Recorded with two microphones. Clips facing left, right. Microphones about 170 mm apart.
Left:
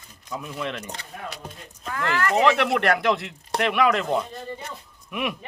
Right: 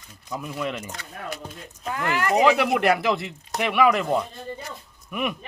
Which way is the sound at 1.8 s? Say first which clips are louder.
Even; 20° right (ahead or behind).